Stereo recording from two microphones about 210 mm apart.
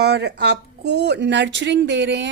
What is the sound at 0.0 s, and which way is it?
A woman's voice, 55° right (ahead or behind).